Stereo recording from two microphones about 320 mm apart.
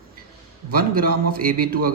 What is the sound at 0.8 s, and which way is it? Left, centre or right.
A man's voice, right.